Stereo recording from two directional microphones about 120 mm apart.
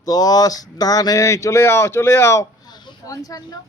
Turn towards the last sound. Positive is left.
turn(degrees=30)  # may be behind; listen again after turning